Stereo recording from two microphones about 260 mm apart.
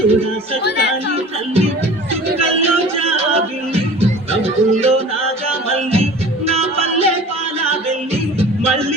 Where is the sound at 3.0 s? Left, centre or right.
Right.